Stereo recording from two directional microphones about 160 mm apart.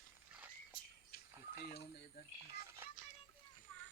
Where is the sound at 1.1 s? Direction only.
70° left (ahead or behind).